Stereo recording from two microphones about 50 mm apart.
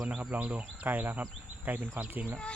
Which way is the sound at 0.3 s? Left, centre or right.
Right.